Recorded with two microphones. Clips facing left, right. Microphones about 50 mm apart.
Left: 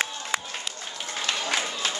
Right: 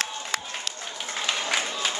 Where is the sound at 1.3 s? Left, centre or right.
Centre.